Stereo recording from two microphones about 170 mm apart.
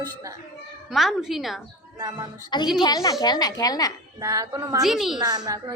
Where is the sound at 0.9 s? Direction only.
Centre (ahead or behind).